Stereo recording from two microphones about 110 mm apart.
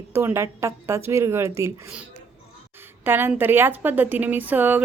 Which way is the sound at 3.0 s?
20° right (ahead or behind).